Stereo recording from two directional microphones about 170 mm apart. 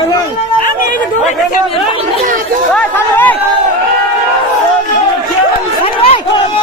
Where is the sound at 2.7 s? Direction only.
10° left (ahead or behind).